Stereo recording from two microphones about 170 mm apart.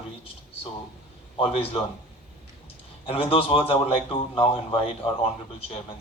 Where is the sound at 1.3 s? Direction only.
35° left (ahead or behind).